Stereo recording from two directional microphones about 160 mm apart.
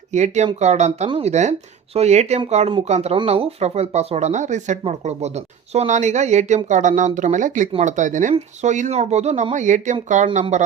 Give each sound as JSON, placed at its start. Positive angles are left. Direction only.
{"t": 0.1, "sound": "speech", "side_deg": -45}